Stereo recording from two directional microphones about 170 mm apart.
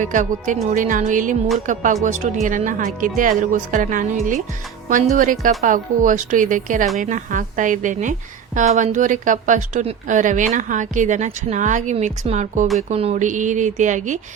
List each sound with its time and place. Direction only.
0.0 s a woman's voice: 50° right (ahead or behind)